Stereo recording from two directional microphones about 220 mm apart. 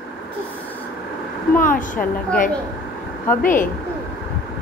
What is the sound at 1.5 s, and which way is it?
Speech, 40° left (ahead or behind).